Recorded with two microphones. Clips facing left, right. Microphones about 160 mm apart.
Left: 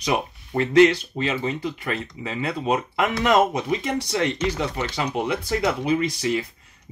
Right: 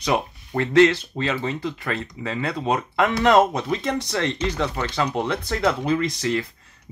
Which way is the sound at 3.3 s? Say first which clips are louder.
Right 2 dB; 10° left (ahead or behind).